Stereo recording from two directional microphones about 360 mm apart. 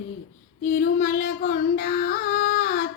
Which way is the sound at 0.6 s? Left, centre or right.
Left.